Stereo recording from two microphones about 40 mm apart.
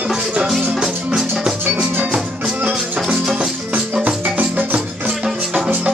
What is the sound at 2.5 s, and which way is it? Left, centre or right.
Music, right.